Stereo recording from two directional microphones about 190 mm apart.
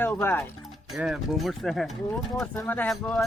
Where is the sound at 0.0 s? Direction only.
10° left (ahead or behind).